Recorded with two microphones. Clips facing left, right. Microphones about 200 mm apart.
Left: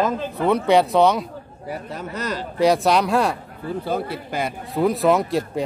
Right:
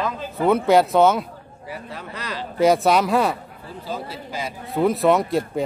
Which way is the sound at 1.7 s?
45° left (ahead or behind).